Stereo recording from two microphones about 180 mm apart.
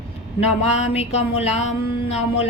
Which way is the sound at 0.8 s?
35° left (ahead or behind).